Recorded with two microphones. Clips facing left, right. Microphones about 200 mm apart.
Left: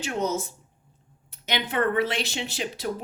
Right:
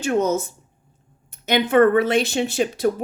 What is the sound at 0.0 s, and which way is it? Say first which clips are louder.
Speech: right 7 dB; 50° right (ahead or behind).